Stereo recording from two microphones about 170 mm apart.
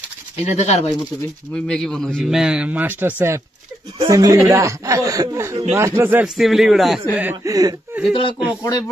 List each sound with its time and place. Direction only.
0.4 s speech: 40° left (ahead or behind)
1.5 s a man's voice: 5° left (ahead or behind)
7.2 s speech: 20° right (ahead or behind)
8.1 s speech: 30° left (ahead or behind)